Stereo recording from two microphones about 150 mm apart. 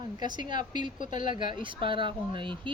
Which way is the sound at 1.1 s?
30° right (ahead or behind).